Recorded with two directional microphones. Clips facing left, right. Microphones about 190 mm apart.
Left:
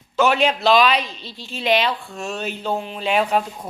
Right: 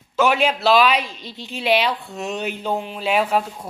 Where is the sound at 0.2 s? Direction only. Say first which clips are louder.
Even; 10° right (ahead or behind).